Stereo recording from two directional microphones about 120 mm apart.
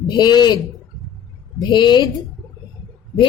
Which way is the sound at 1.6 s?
40° left (ahead or behind).